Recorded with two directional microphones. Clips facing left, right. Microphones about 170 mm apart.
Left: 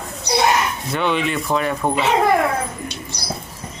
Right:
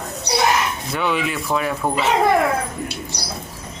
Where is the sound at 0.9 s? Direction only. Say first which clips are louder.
Left 2 dB; 5° right (ahead or behind).